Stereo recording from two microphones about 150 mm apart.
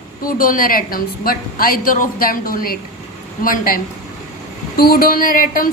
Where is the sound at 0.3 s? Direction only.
70° left (ahead or behind).